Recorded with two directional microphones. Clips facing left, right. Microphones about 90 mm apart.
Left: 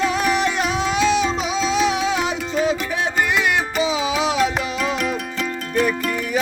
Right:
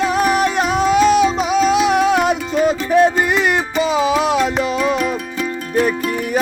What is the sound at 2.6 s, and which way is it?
Music, 45° right (ahead or behind).